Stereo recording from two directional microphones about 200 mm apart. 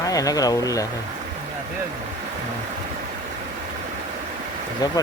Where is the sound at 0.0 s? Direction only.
15° left (ahead or behind).